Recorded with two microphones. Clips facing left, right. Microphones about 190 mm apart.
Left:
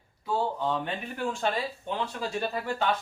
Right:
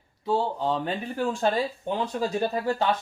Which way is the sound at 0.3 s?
30° right (ahead or behind).